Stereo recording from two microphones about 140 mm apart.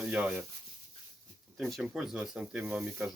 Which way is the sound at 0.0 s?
5° right (ahead or behind).